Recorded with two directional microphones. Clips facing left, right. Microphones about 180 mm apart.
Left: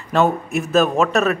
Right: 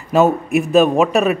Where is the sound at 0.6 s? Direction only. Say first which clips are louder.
Right 3 dB; centre (ahead or behind).